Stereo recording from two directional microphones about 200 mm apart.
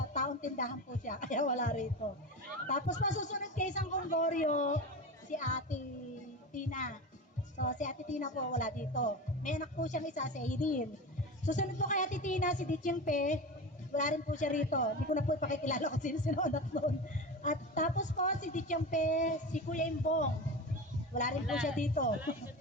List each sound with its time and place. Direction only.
0.1 s speech: 40° left (ahead or behind)
21.8 s speech: 40° left (ahead or behind)